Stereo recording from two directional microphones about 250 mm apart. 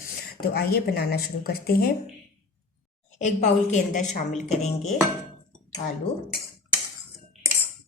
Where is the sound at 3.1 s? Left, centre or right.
Left.